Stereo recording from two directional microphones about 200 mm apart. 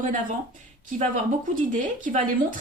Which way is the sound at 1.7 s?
40° right (ahead or behind).